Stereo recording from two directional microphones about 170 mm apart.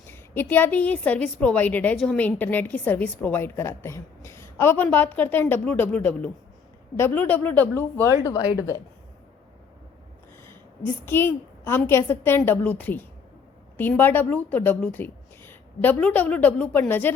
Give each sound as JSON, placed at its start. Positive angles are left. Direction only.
{"t": 0.1, "sound": "a woman's voice", "side_deg": 10}
{"t": 11.0, "sound": "a woman's voice", "side_deg": 15}